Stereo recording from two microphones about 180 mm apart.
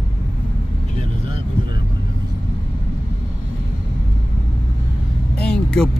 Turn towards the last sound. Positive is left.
turn(degrees=5)  # may be behind; listen again after turning